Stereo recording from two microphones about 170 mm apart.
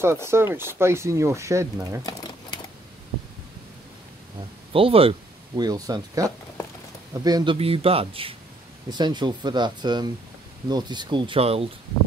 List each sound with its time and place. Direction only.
0.0 s speech: 15° right (ahead or behind)
2.0 s a sound: 25° left (ahead or behind)
4.7 s a man's voice: 35° right (ahead or behind)
5.6 s speech: 20° right (ahead or behind)
7.2 s speech: 25° right (ahead or behind)
7.5 s a man's voice: 35° right (ahead or behind)